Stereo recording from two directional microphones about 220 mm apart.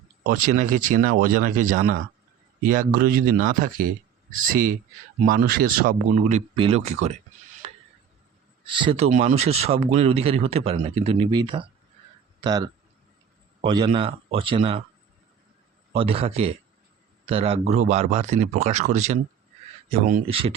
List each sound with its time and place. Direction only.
0.3 s speech: 35° right (ahead or behind)
7.6 s a sound: 25° right (ahead or behind)
8.7 s speech: 25° right (ahead or behind)
15.9 s speech: 25° right (ahead or behind)
20.2 s speech: 25° right (ahead or behind)